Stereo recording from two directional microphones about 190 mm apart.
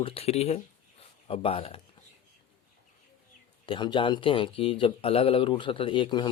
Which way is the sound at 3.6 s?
25° left (ahead or behind).